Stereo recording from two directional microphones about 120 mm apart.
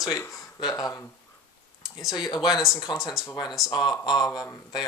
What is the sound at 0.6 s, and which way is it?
Speech, 30° left (ahead or behind).